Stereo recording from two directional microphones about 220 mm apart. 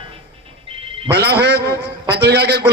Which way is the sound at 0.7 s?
25° right (ahead or behind).